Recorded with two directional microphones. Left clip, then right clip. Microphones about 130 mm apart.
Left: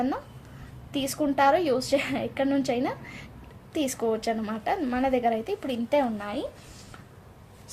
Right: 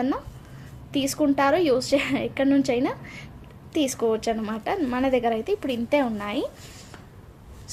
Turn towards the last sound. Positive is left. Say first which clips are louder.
# right 2 dB
turn(degrees=-50)  # may be behind; listen again after turning